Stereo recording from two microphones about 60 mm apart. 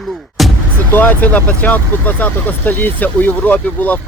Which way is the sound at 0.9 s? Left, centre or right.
Left.